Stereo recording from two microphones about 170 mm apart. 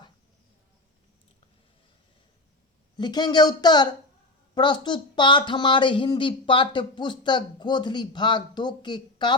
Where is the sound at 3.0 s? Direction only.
25° left (ahead or behind).